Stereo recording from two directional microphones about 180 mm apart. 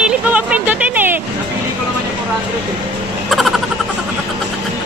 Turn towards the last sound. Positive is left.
turn(degrees=0)  # may be behind; listen again after turning